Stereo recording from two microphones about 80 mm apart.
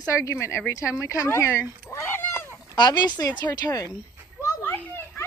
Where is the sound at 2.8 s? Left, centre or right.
Left.